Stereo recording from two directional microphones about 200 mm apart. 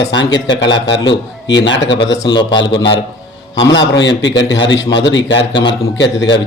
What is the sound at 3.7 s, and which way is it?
Speech, 65° left (ahead or behind).